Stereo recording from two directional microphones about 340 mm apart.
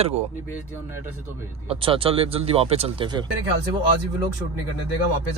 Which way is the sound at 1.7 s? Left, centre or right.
Centre.